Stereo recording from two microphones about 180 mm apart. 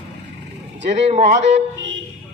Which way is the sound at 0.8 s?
40° right (ahead or behind).